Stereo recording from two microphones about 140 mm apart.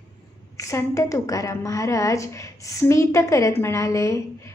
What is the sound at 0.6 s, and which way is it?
A woman's voice, 20° left (ahead or behind).